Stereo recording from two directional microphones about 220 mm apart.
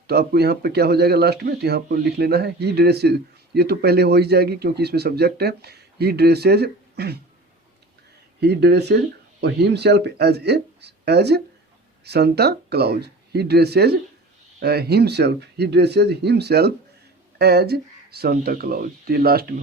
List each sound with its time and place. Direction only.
0.1 s speech: 45° right (ahead or behind)
8.4 s speech: 50° right (ahead or behind)